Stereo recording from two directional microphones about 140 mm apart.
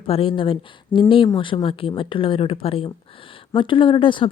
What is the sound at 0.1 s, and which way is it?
Speech, 40° left (ahead or behind).